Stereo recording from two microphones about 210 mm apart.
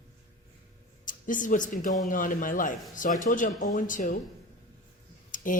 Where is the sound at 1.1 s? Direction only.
40° left (ahead or behind).